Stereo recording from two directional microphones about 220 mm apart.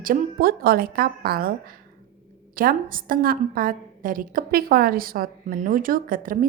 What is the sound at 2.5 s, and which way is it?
A woman's voice, 40° right (ahead or behind).